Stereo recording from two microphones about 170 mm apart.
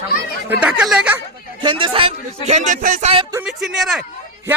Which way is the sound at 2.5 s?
45° right (ahead or behind).